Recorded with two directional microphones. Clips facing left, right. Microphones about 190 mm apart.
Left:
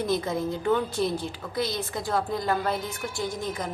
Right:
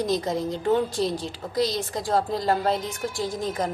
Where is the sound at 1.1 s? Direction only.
90° right.